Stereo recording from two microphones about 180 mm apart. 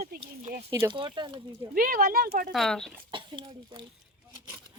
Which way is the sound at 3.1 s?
25° right (ahead or behind).